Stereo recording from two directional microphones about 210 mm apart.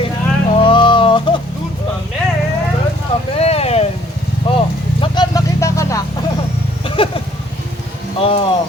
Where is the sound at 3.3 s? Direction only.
30° left (ahead or behind).